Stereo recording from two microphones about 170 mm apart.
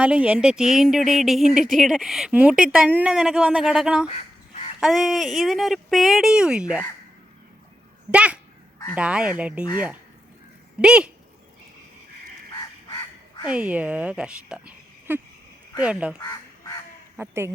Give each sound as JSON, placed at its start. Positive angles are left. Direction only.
{"t": 0.0, "sound": "speech", "side_deg": -10}
{"t": 1.5, "sound": "speech", "side_deg": -50}
{"t": 1.7, "sound": "speech", "side_deg": 0}
{"t": 4.1, "sound": "crow", "side_deg": 40}
{"t": 4.8, "sound": "speech", "side_deg": 0}
{"t": 8.1, "sound": "speech", "side_deg": -5}
{"t": 10.8, "sound": "speech", "side_deg": -5}
{"t": 13.5, "sound": "speech", "side_deg": -5}
{"t": 16.1, "sound": "goose", "side_deg": 20}
{"t": 17.2, "sound": "speech", "side_deg": -15}